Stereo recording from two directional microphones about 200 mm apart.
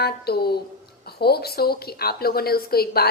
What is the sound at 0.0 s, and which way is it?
A woman's voice, 50° left (ahead or behind).